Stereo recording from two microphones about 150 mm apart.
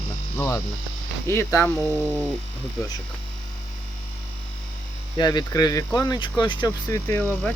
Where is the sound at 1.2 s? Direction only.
15° left (ahead or behind).